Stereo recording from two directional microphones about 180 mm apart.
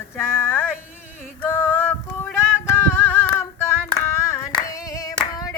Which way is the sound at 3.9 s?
15° left (ahead or behind).